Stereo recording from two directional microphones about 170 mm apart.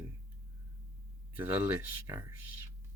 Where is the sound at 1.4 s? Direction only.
10° right (ahead or behind).